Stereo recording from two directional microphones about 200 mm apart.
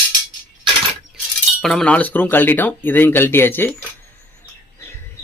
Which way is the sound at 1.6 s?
5° left (ahead or behind).